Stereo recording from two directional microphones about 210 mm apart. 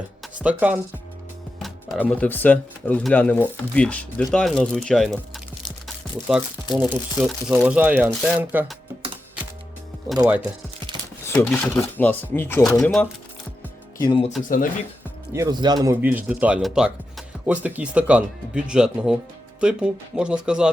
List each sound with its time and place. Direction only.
0.3 s speech: 5° right (ahead or behind)
10.2 s speech: 10° right (ahead or behind)
11.3 s speech: 10° left (ahead or behind)
14.0 s speech: 25° left (ahead or behind)
15.3 s speech: 15° right (ahead or behind)